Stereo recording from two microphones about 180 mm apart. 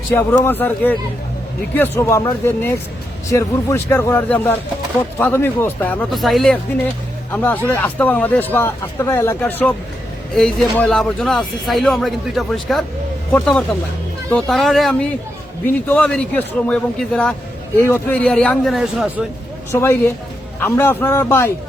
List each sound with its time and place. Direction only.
0.1 s speech: 15° left (ahead or behind)
19.7 s speech: 15° left (ahead or behind)